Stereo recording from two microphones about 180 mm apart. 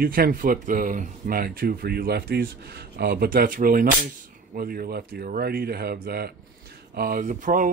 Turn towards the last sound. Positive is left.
turn(degrees=-45)  # may be behind; listen again after turning